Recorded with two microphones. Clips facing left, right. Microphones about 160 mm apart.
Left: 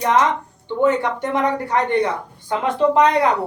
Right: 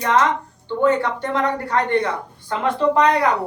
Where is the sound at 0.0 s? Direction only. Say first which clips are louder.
Left 1 dB; 15° left (ahead or behind).